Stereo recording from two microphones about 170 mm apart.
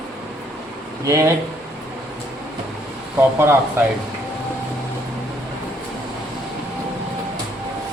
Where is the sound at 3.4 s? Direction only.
15° right (ahead or behind).